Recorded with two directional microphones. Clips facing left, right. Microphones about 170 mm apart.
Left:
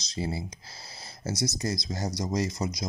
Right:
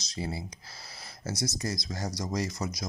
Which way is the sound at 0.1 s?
25° left (ahead or behind).